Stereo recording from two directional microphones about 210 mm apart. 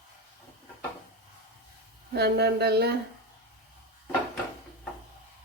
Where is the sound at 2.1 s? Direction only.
50° right (ahead or behind).